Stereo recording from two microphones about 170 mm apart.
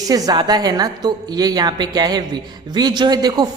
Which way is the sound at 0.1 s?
20° right (ahead or behind).